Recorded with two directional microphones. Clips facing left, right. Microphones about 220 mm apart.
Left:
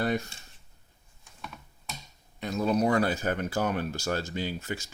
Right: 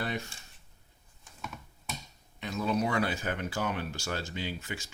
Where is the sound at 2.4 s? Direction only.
40° left (ahead or behind).